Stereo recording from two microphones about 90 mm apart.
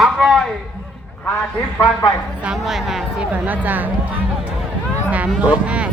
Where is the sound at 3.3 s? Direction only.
20° right (ahead or behind).